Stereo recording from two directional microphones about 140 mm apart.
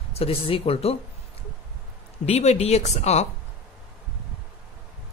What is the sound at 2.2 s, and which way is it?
Speech, 50° left (ahead or behind).